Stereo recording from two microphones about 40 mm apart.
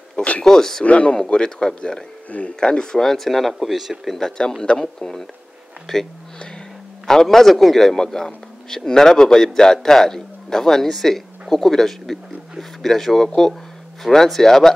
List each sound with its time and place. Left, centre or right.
0.4 s a man's voice: centre
0.8 s speech: left
1.1 s speech: centre
4.4 s a man's voice: centre
7.1 s a man's voice: centre